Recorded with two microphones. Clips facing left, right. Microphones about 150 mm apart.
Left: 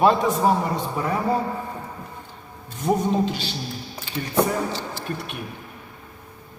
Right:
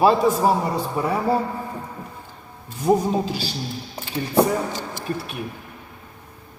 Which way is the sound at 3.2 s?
35° right (ahead or behind).